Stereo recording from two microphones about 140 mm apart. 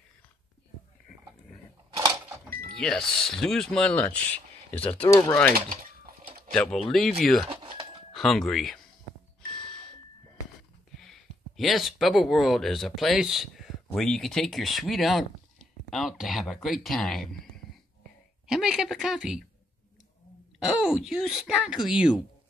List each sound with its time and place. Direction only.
2.0 s vehicle: 25° right (ahead or behind)
2.7 s speech: 5° left (ahead or behind)
5.1 s speech: 25° left (ahead or behind)
6.5 s speech: 5° left (ahead or behind)
7.4 s a sound: 40° right (ahead or behind)
8.1 s speech: centre (ahead or behind)
9.5 s doorbell: 5° left (ahead or behind)
11.0 s speech: centre (ahead or behind)
18.5 s speech: 5° right (ahead or behind)
20.5 s speech: 5° right (ahead or behind)